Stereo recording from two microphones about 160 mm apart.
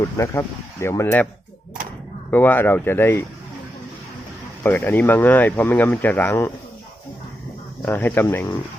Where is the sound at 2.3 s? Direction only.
10° left (ahead or behind).